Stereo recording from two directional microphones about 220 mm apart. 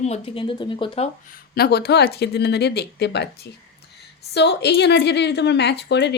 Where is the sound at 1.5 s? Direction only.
45° left (ahead or behind).